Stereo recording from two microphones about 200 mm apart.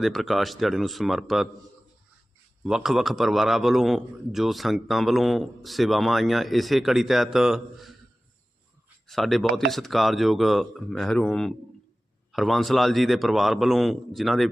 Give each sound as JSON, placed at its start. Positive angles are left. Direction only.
{"t": 0.0, "sound": "a man's voice", "side_deg": 0}
{"t": 2.6, "sound": "a man's voice", "side_deg": -5}
{"t": 9.0, "sound": "a man's voice", "side_deg": 0}